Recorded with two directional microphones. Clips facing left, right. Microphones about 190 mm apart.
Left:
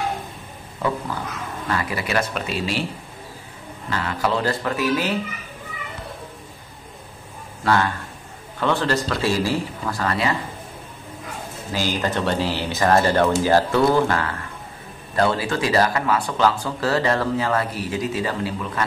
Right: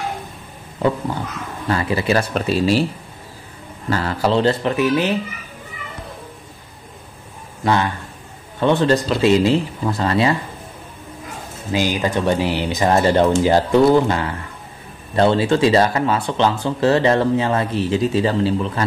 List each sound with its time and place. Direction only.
1.7 s speech: 25° right (ahead or behind)
2.3 s speech: 40° right (ahead or behind)
3.9 s speech: 35° right (ahead or behind); by 5.1 s 20° right (ahead or behind)
7.6 s speech: 20° right (ahead or behind)
11.7 s speech: 15° right (ahead or behind)